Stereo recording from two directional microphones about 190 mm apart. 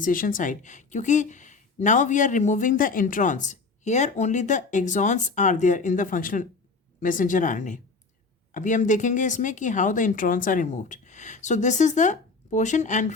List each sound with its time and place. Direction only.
0.0 s a woman's voice: 45° left (ahead or behind)